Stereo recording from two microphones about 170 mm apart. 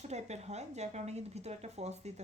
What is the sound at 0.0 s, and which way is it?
A woman's voice, 40° right (ahead or behind).